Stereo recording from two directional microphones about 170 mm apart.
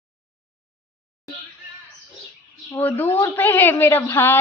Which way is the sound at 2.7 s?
10° left (ahead or behind).